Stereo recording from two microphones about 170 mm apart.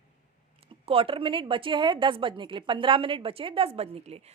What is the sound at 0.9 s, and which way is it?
A woman's voice, 30° right (ahead or behind).